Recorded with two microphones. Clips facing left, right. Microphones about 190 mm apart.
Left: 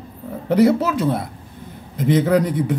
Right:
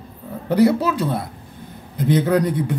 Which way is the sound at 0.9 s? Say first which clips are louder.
Left 1 dB; centre (ahead or behind).